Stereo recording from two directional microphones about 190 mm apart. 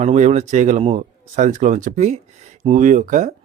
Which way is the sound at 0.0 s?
35° right (ahead or behind).